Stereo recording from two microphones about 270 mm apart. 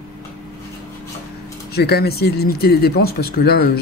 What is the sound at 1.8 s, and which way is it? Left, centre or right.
Speech, left.